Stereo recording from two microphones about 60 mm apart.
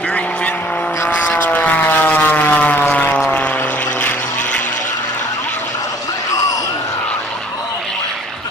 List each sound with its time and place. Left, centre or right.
1.4 s vehicle: left